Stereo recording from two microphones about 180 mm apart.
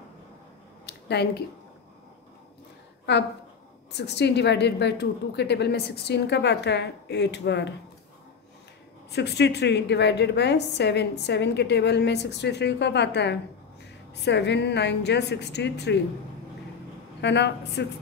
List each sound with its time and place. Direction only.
0.8 s a sound: 65° left (ahead or behind)
3.9 s a woman's voice: 70° left (ahead or behind)
9.1 s a woman's voice: 70° left (ahead or behind)
17.2 s a woman's voice: 70° left (ahead or behind)